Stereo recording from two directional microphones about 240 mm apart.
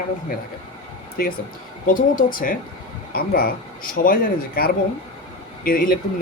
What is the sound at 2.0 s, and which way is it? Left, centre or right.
Speech, left.